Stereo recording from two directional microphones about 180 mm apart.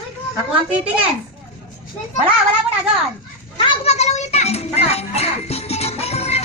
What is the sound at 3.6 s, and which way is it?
Music, 30° left (ahead or behind).